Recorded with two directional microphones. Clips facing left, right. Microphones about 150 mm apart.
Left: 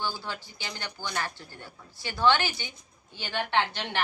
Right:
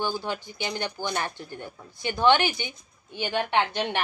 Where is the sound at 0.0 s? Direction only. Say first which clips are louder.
Right 5 dB; 15° right (ahead or behind).